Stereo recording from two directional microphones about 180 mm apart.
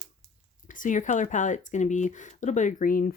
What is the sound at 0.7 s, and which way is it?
Speech, 45° left (ahead or behind).